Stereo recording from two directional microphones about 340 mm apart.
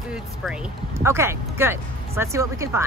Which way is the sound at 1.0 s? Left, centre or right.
Centre.